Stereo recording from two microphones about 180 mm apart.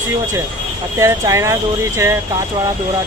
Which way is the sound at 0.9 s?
15° right (ahead or behind).